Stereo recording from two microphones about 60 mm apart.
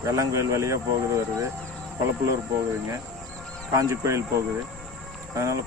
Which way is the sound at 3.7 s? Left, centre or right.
Right.